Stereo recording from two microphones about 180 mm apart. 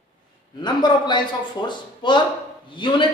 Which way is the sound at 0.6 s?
25° left (ahead or behind).